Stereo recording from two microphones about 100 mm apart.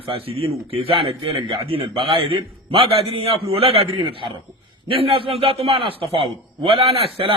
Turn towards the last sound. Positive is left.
turn(degrees=-70)  # may be behind; listen again after turning